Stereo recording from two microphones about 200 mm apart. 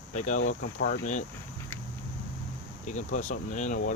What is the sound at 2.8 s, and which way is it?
Speech, 35° left (ahead or behind).